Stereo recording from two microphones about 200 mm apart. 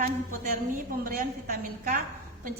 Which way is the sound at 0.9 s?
45° right (ahead or behind).